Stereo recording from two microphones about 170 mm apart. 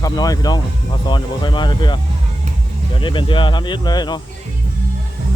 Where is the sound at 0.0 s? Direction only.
20° left (ahead or behind).